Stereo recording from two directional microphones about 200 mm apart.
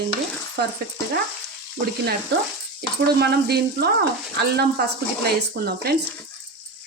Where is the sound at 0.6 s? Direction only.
55° right (ahead or behind).